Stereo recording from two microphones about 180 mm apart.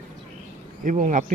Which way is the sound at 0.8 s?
45° right (ahead or behind).